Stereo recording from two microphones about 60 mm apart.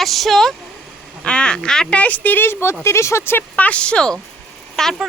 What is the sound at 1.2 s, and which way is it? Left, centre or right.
Speech, centre.